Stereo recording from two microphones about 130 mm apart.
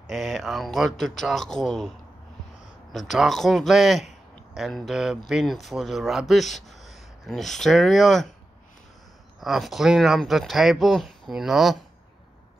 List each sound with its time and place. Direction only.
0.0 s speech: centre (ahead or behind)
2.9 s speech: centre (ahead or behind)
9.4 s speech: centre (ahead or behind)